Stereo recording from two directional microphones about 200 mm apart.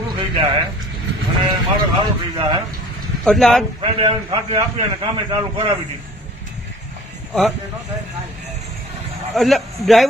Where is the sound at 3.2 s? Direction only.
Centre (ahead or behind).